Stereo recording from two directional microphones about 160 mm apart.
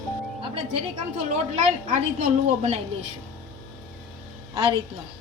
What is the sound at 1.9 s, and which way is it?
Speech, 45° right (ahead or behind).